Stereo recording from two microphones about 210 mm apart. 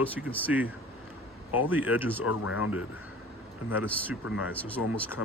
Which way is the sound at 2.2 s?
90° left.